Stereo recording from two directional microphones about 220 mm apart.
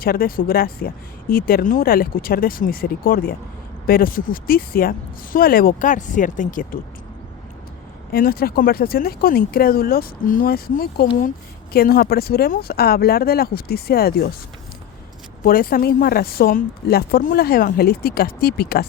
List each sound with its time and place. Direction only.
0.0 s speech: 40° left (ahead or behind)
8.1 s speech: 45° left (ahead or behind)
15.4 s speech: 40° left (ahead or behind)